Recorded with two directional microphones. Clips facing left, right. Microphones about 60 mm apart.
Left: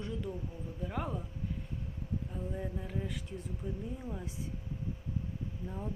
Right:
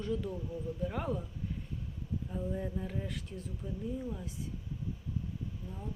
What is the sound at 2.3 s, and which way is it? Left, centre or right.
Speech, centre.